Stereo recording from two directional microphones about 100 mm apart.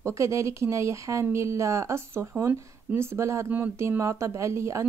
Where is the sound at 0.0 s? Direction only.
30° right (ahead or behind).